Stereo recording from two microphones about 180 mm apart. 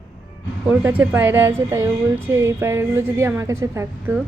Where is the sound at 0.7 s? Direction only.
10° right (ahead or behind).